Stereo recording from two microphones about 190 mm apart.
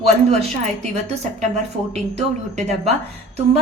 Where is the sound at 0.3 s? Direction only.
35° right (ahead or behind).